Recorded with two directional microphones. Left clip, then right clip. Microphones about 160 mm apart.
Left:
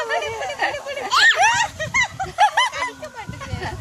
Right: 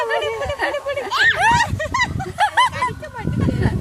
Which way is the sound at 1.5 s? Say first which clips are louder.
Right 2 dB; 45° right (ahead or behind).